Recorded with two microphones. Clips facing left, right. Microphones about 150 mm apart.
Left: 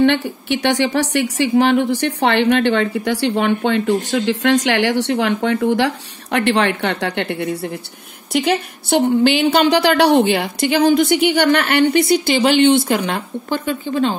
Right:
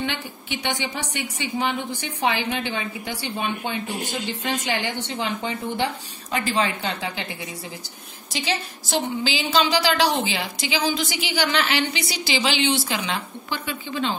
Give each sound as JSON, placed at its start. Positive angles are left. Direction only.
{"t": 0.0, "sound": "a woman's voice", "side_deg": 70}
{"t": 4.1, "sound": "a woman's voice", "side_deg": 90}